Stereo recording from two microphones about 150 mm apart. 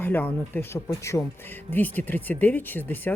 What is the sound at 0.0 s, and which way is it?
Speech, 10° left (ahead or behind).